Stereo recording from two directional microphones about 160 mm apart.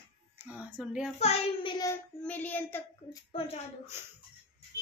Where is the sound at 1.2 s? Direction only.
35° left (ahead or behind).